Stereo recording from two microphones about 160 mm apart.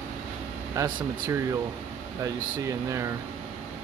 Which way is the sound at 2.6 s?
20° right (ahead or behind).